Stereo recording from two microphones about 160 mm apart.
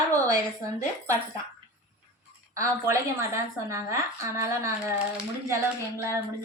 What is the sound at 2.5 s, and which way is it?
A woman's voice, 20° right (ahead or behind).